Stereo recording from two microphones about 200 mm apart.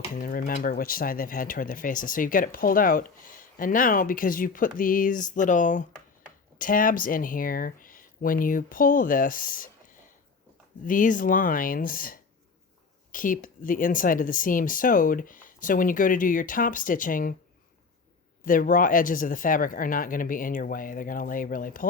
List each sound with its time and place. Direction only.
0.1 s speech: 45° left (ahead or behind)
18.4 s speech: 45° left (ahead or behind)